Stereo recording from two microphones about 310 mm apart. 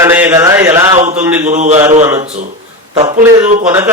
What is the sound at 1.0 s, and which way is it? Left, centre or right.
Speech, right.